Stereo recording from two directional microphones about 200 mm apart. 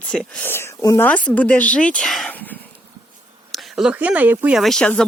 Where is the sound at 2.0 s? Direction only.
Centre (ahead or behind).